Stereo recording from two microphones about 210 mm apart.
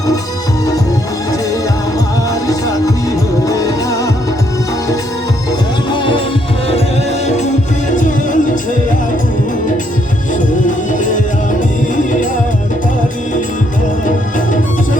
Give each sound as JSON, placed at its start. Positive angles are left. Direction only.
{"t": 2.5, "sound": "music", "side_deg": 15}
{"t": 5.5, "sound": "music", "side_deg": 20}
{"t": 7.9, "sound": "music", "side_deg": 35}